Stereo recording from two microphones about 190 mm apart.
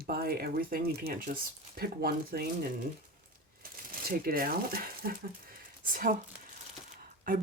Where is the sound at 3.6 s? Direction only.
50° right (ahead or behind).